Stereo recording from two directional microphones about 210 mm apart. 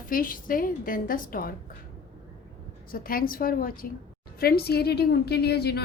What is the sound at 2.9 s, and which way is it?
A woman's voice, 45° left (ahead or behind).